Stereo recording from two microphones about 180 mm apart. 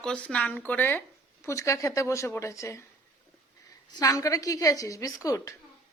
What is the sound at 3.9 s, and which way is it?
Speech, 20° left (ahead or behind).